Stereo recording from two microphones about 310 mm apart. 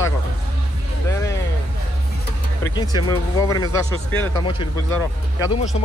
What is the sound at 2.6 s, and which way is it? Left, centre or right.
Speech, centre.